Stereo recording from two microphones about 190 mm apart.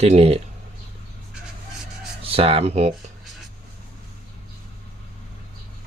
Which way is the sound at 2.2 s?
30° right (ahead or behind).